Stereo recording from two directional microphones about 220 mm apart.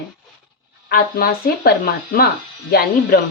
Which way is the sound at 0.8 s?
45° left (ahead or behind).